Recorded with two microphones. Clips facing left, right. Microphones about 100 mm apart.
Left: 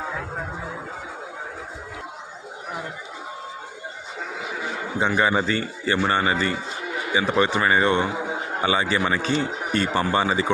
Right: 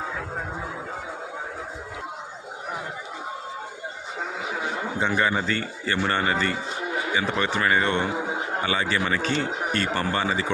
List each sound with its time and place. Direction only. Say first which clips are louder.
4.9 s speech: left 4 dB; 15° left (ahead or behind)